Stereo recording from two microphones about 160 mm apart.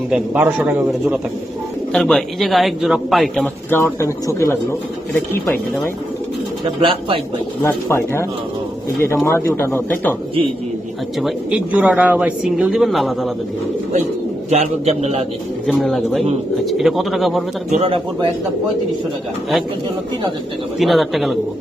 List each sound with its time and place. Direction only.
0.3 s speech: 15° right (ahead or behind)
1.9 s speech: centre (ahead or behind)
3.7 s speech: 15° left (ahead or behind)
6.7 s a man's voice: 35° right (ahead or behind)
7.6 s speech: 15° left (ahead or behind)
11.2 s speech: centre (ahead or behind)
14.5 s a man's voice: 40° right (ahead or behind)
15.6 s speech: centre (ahead or behind)
17.7 s a man's voice: 40° right (ahead or behind)
20.7 s speech: centre (ahead or behind)